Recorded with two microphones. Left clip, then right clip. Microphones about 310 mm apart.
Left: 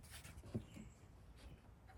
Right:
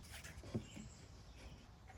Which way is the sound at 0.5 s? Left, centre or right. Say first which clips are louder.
Right 3 dB; centre.